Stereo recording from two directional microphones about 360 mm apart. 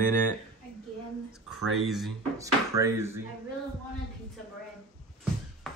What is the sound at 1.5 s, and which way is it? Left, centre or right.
Speech, centre.